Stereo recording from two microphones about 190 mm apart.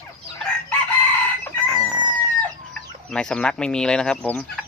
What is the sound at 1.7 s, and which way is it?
Chicken, 5° right (ahead or behind).